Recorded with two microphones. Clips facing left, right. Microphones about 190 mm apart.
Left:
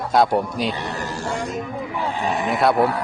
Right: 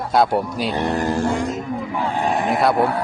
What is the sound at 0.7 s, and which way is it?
Music, 50° right (ahead or behind).